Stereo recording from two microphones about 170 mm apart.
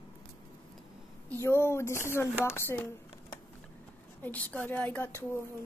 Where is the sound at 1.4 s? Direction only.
15° left (ahead or behind).